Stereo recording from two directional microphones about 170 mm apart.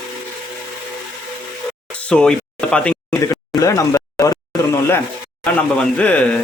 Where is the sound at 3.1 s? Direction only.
20° left (ahead or behind).